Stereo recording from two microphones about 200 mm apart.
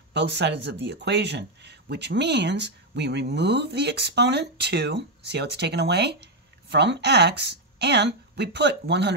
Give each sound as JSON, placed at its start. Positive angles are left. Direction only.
{"t": 0.1, "sound": "speech", "side_deg": -60}